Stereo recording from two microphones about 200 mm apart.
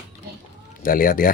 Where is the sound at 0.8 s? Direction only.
45° left (ahead or behind).